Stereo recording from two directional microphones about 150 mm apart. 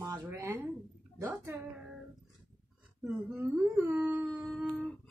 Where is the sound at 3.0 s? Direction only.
10° right (ahead or behind).